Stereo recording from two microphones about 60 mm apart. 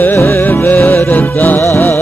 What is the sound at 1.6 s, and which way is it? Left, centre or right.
Music, left.